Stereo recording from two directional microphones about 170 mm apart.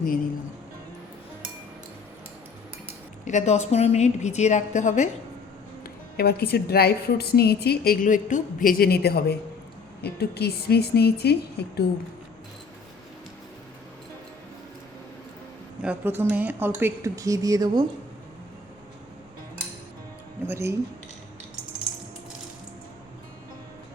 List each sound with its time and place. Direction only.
3.2 s a woman's voice: 45° left (ahead or behind)
5.8 s a woman's voice: 65° left (ahead or behind)
15.8 s speech: 10° right (ahead or behind)
20.5 s speech: 15° right (ahead or behind)